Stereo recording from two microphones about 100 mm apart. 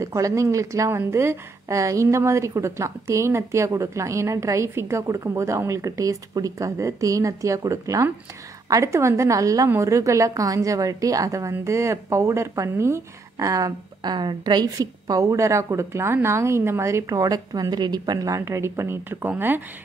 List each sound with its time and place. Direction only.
0.0 s a woman's voice: 30° right (ahead or behind)